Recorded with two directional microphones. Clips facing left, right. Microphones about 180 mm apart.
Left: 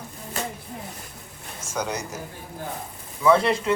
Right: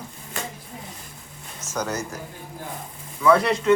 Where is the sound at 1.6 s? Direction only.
10° left (ahead or behind).